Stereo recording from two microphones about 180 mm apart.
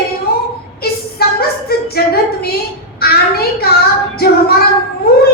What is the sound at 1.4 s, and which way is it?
Music, 60° left (ahead or behind).